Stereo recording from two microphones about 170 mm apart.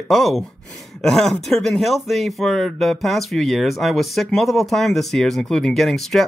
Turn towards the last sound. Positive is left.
turn(degrees=0)  # may be behind; listen again after turning